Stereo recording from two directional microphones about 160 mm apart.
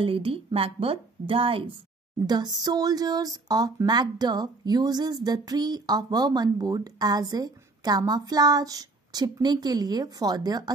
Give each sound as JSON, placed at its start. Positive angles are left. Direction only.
{"t": 0.0, "sound": "speech", "side_deg": -35}